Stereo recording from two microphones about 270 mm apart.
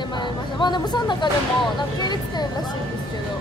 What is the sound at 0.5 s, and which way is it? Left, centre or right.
Speech, centre.